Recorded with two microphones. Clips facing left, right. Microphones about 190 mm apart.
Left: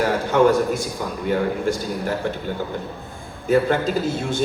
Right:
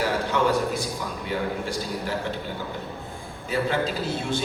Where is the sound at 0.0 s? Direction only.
45° left (ahead or behind).